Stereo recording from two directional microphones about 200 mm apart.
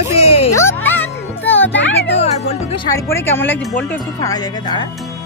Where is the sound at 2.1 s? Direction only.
30° left (ahead or behind).